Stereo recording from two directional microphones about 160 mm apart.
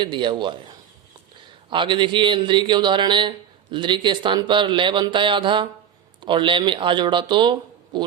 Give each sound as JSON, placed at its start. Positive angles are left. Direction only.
{"t": 0.0, "sound": "a man's voice", "side_deg": -30}
{"t": 1.7, "sound": "a man's voice", "side_deg": -30}